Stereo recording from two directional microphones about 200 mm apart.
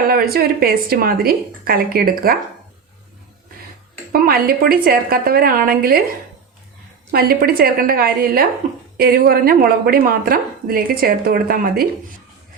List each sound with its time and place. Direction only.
0.1 s a woman's voice: 50° right (ahead or behind)
4.1 s a woman's voice: 50° right (ahead or behind)
7.1 s a woman's voice: 50° right (ahead or behind)